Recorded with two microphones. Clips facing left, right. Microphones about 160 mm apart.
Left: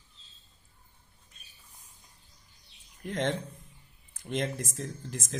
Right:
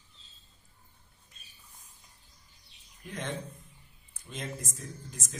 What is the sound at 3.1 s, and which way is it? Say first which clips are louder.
Speech: left 7 dB; 90° left.